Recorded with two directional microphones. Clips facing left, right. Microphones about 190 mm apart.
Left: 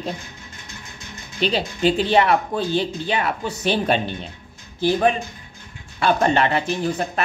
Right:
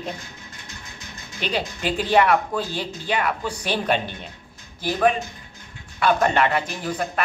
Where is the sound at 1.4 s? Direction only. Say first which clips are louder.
Left 6 dB; 30° left (ahead or behind).